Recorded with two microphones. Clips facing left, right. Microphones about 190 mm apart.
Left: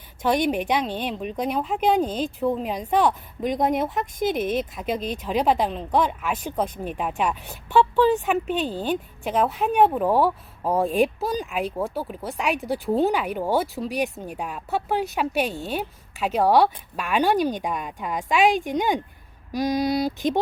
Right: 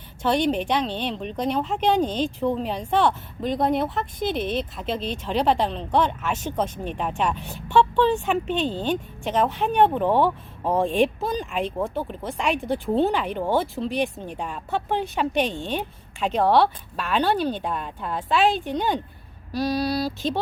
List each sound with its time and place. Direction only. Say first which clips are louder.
0.2 s speech: even; 10° left (ahead or behind)